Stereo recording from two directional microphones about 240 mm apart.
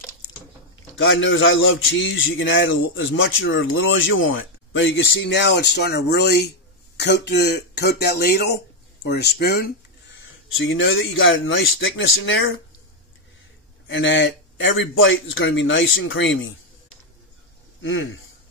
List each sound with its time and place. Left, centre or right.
1.0 s speech: left
10.1 s speech: left
13.8 s speech: left